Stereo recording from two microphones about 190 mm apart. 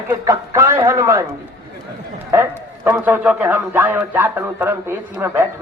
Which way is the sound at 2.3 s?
10° right (ahead or behind).